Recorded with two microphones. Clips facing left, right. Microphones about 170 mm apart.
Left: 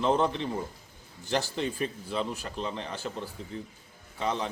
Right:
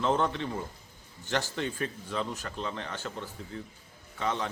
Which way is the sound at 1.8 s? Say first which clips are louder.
Left 2 dB; 15° left (ahead or behind).